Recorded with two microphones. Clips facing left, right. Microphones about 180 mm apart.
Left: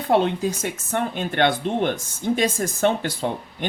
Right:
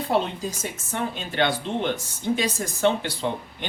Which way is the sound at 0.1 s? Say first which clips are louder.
Left 6 dB; 60° left (ahead or behind).